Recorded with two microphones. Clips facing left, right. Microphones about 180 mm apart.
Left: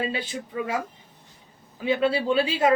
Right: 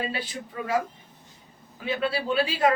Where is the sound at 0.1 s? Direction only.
25° left (ahead or behind).